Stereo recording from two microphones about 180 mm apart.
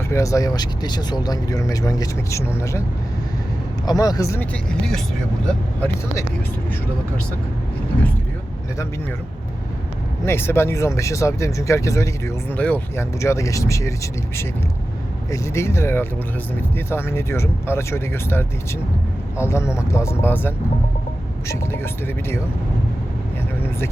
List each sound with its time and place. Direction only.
0.1 s speech: 15° left (ahead or behind)
3.8 s speech: 20° left (ahead or behind)
5.5 s speech: 10° left (ahead or behind)
10.2 s speech: 15° left (ahead or behind)